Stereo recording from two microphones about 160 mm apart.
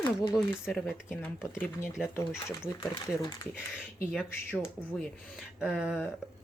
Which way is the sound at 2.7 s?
25° left (ahead or behind).